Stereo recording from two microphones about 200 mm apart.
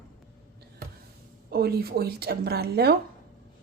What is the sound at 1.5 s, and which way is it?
A woman's voice, 50° right (ahead or behind).